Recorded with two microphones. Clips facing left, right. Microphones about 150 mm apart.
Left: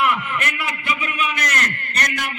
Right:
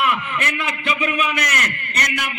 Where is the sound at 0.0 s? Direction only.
20° right (ahead or behind).